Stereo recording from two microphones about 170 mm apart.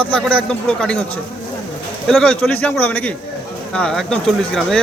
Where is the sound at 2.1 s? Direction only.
5° left (ahead or behind).